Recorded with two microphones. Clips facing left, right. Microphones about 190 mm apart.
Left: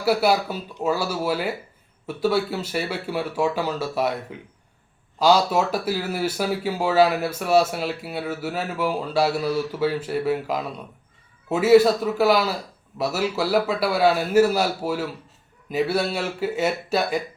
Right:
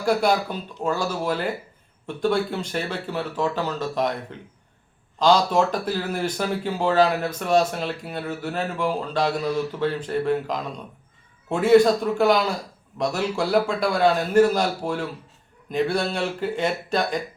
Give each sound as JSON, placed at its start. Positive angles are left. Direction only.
{"t": 0.0, "sound": "a man's voice", "side_deg": 5}